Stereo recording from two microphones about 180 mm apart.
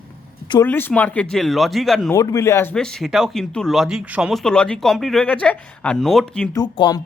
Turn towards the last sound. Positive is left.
turn(degrees=25)  # may be behind; listen again after turning